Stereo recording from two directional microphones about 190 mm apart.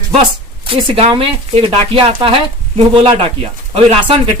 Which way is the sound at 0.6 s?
30° right (ahead or behind).